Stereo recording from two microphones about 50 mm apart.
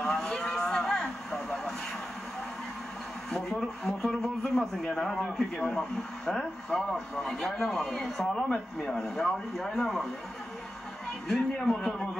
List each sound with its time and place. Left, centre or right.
0.0 s cattle: centre
3.3 s a sound: centre
3.8 s speech: centre
4.8 s speech: centre
11.2 s speech: centre